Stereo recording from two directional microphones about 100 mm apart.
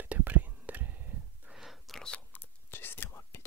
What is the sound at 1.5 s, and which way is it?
Whispering, 5° right (ahead or behind).